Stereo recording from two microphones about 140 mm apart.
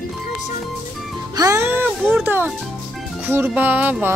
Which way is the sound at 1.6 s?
10° right (ahead or behind).